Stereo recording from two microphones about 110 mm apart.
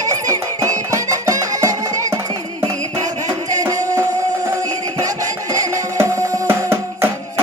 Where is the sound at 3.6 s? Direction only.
30° right (ahead or behind).